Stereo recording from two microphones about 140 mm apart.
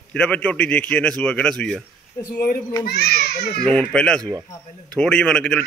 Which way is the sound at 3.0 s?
90° left.